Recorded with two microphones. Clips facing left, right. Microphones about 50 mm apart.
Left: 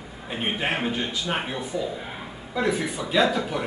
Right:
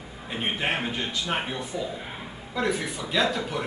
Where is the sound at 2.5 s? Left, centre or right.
Centre.